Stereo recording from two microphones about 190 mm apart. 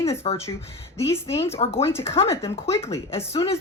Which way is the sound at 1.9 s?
15° left (ahead or behind).